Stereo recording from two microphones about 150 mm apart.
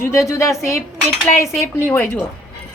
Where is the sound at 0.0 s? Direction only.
20° left (ahead or behind).